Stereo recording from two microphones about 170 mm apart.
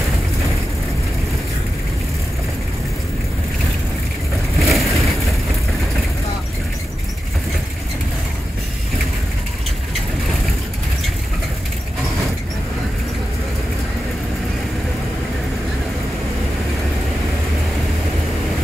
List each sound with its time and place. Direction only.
4.6 s vehicle: centre (ahead or behind)